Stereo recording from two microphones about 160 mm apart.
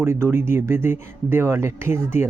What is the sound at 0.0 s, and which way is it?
Speech, 15° right (ahead or behind).